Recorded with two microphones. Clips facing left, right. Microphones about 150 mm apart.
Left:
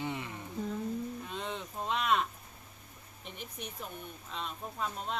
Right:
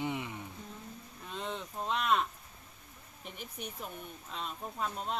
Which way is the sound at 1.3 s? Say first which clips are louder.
Even; centre (ahead or behind).